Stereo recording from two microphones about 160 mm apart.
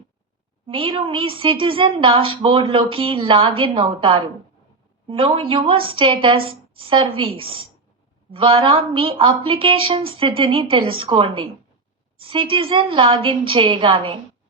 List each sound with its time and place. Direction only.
0.7 s a woman's voice: 35° right (ahead or behind)